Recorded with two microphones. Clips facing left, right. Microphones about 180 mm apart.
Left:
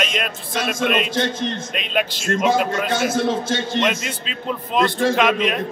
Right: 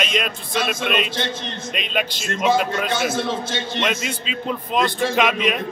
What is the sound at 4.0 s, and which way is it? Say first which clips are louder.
Speech: right 2 dB; centre (ahead or behind).